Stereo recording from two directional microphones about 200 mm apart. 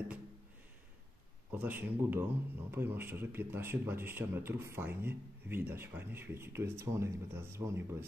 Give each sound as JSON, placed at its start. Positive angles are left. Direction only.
{"t": 1.5, "sound": "speech", "side_deg": -10}